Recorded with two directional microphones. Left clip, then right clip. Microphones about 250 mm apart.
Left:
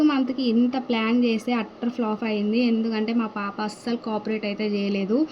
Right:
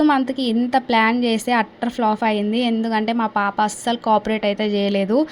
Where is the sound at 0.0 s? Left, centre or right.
Right.